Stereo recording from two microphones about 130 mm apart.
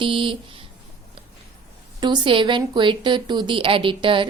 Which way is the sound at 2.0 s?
35° right (ahead or behind).